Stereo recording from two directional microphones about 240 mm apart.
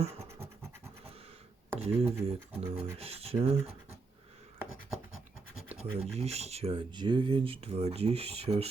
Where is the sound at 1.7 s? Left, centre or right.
Right.